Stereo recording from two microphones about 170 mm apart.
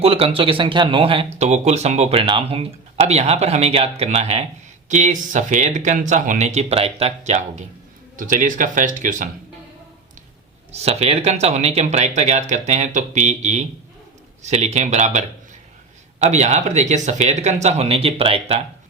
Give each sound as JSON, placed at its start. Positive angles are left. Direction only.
{"t": 0.0, "sound": "speech", "side_deg": -35}
{"t": 10.7, "sound": "speech", "side_deg": -40}
{"t": 16.2, "sound": "speech", "side_deg": -40}